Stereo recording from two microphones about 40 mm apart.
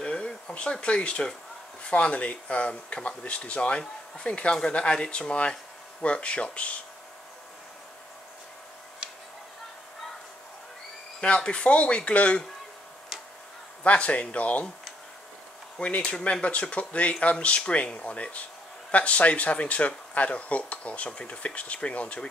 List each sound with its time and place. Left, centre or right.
0.0 s a sound: left
0.6 s speech: left
11.1 s speech: left
13.8 s speech: left
16.1 s speech: left